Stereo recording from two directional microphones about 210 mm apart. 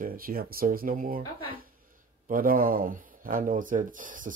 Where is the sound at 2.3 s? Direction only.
40° right (ahead or behind).